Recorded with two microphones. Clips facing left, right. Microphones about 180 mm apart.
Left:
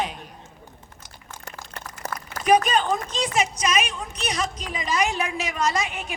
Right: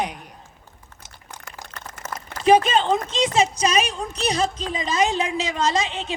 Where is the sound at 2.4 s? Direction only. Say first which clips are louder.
Right 3 dB; 25° right (ahead or behind).